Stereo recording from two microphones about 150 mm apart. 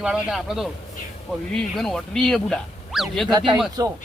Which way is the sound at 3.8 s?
25° right (ahead or behind).